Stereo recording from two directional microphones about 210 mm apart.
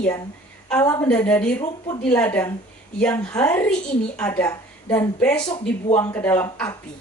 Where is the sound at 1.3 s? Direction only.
5° left (ahead or behind).